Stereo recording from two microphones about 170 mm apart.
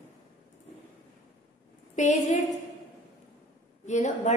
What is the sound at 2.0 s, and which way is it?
Speech, 45° left (ahead or behind).